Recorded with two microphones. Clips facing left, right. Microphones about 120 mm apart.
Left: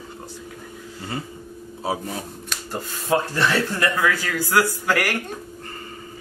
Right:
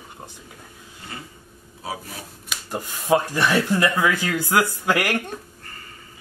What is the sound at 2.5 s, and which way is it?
Speech, 15° right (ahead or behind).